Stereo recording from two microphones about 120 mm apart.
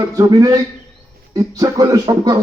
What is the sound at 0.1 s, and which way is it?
A man's voice, 30° right (ahead or behind).